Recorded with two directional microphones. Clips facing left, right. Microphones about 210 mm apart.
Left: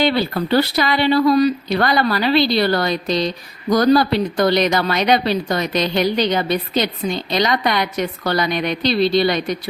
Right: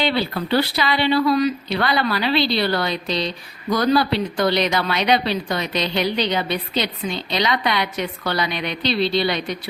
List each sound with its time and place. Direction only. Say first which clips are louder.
0.0 s speech: left 4 dB; 45° left (ahead or behind)